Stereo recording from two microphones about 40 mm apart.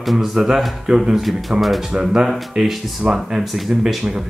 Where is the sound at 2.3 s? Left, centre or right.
Centre.